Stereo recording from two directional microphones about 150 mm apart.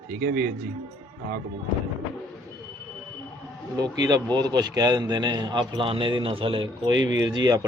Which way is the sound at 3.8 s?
25° right (ahead or behind).